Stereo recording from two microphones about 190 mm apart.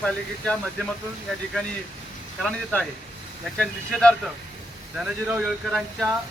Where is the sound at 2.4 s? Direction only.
5° left (ahead or behind).